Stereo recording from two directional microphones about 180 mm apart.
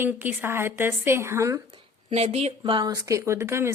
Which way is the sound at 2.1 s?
35° right (ahead or behind).